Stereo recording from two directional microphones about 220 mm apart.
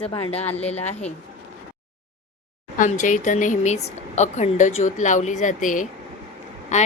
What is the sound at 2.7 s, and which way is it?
A woman's voice, 35° left (ahead or behind).